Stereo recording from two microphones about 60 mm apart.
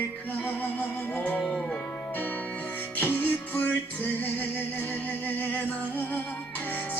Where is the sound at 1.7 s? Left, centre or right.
Left.